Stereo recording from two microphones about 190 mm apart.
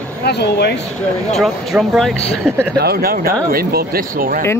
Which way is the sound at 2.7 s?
55° right (ahead or behind).